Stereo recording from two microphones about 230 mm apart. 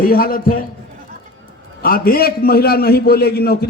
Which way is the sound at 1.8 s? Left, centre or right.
Left.